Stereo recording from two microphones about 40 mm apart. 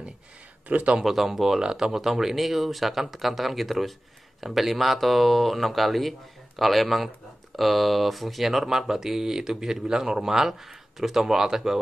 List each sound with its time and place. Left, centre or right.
0.7 s speech: right
1.0 s speech: centre